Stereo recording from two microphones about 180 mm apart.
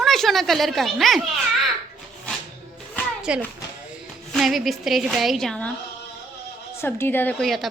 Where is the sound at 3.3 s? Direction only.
5° right (ahead or behind).